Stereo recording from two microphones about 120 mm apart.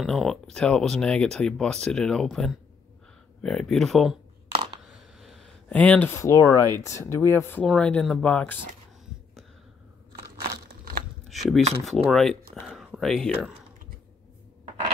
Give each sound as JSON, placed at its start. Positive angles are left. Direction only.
{"t": 0.0, "sound": "speech", "side_deg": 0}
{"t": 5.7, "sound": "speech", "side_deg": 10}
{"t": 7.6, "sound": "speech", "side_deg": 5}
{"t": 11.2, "sound": "a sound", "side_deg": 0}
{"t": 11.9, "sound": "speech", "side_deg": 0}